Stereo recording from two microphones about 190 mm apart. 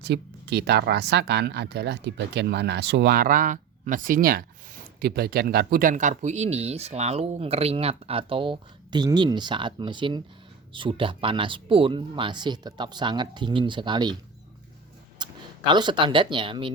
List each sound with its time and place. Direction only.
0.0 s speech: 60° right (ahead or behind); by 14.2 s 25° right (ahead or behind)
15.2 s speech: 25° right (ahead or behind)